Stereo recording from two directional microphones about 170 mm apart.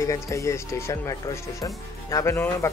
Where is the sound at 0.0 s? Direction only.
20° left (ahead or behind).